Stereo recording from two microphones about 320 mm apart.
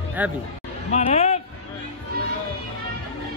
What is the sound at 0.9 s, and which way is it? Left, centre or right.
Speech, centre.